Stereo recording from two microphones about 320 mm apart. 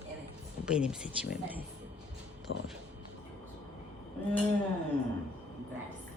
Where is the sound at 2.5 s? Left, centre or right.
Left.